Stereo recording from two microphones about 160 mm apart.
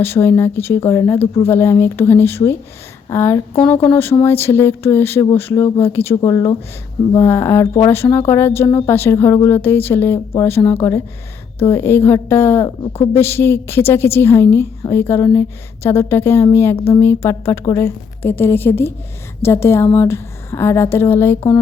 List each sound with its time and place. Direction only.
0.0 s a woman's voice: 15° left (ahead or behind)
12.6 s speech: 35° left (ahead or behind)
13.1 s a woman's voice: 15° left (ahead or behind)